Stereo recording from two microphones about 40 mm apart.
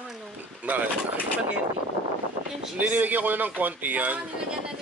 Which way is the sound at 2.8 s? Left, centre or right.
Right.